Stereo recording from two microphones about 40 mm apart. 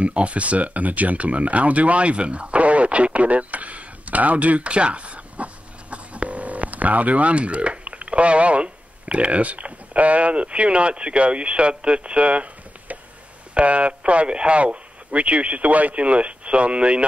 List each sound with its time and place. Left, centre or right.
0.0 s speech: right